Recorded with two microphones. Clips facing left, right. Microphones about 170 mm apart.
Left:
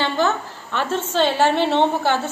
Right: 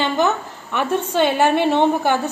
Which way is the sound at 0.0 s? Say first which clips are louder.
Right 2 dB; 15° right (ahead or behind).